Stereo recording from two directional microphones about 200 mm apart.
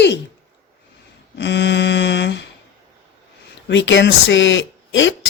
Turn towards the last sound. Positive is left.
turn(degrees=70)  # may be behind; listen again after turning